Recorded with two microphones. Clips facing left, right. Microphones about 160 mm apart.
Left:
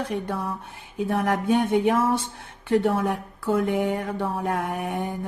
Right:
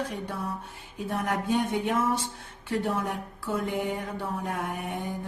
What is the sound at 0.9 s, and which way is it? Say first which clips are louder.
Speech: left 6 dB; 65° left (ahead or behind).